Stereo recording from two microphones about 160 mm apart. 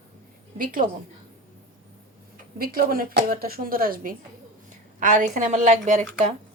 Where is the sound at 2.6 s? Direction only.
65° right (ahead or behind); by 6.3 s 50° right (ahead or behind).